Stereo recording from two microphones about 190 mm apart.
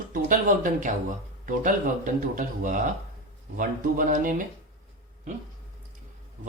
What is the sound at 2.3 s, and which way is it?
Speech, 45° right (ahead or behind).